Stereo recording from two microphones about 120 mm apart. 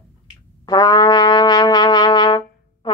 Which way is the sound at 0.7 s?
35° left (ahead or behind).